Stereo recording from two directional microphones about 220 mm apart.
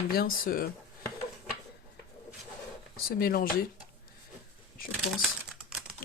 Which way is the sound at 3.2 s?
40° left (ahead or behind).